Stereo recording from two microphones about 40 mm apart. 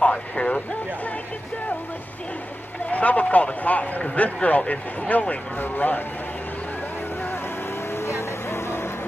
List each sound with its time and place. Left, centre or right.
0.0 s speech: left
2.9 s speech: left
5.6 s speech: left
7.9 s vehicle: left